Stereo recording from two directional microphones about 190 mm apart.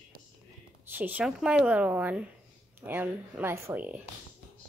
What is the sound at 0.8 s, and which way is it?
A woman's voice, 10° right (ahead or behind).